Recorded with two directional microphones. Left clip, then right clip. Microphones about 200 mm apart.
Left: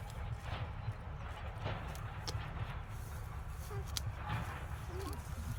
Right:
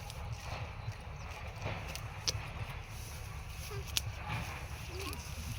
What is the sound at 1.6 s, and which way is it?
Run, 40° right (ahead or behind).